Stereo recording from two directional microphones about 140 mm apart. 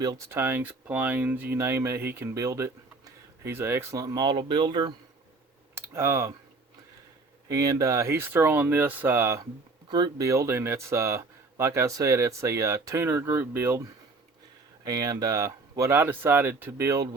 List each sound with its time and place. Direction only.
0.0 s speech: 25° right (ahead or behind)
0.3 s speech: 15° right (ahead or behind); by 4.9 s 30° right (ahead or behind)
5.7 s typing: 20° right (ahead or behind)
7.4 s speech: 25° right (ahead or behind)
14.8 s speech: 25° right (ahead or behind)